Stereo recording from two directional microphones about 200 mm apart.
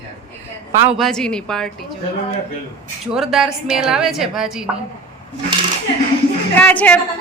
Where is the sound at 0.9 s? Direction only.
Centre (ahead or behind).